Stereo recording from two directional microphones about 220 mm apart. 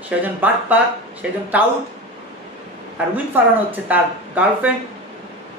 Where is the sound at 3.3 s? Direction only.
10° right (ahead or behind).